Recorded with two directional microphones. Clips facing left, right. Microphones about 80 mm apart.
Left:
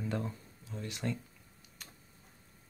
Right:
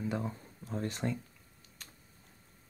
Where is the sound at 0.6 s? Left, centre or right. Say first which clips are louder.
Right 6 dB; right.